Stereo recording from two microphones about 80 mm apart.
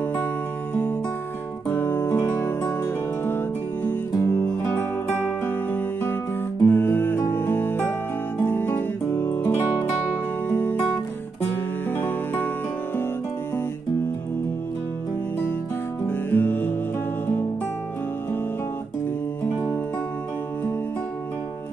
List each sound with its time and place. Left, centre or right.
1.7 s music: left
8.5 s guitar: left
10.5 s music: left
11.9 s music: left
16.1 s music: left